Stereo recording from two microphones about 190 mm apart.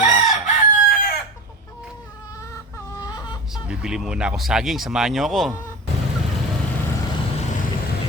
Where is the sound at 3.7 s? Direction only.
5° right (ahead or behind).